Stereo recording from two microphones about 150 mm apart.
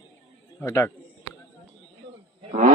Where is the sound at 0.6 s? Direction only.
20° left (ahead or behind).